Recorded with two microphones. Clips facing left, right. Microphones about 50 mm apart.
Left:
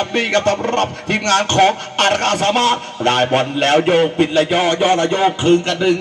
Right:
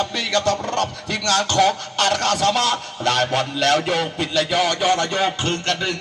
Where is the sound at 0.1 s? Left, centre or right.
Left.